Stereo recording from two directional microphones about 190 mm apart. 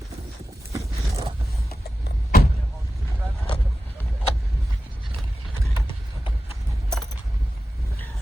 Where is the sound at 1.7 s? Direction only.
55° left (ahead or behind).